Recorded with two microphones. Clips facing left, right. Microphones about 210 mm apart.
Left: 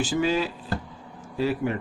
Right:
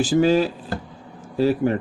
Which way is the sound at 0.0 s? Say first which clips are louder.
Right 7 dB; 40° right (ahead or behind).